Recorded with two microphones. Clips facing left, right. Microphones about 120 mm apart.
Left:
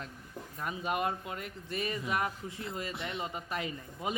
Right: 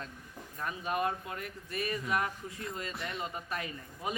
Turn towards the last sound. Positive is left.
turn(degrees=20)  # may be behind; listen again after turning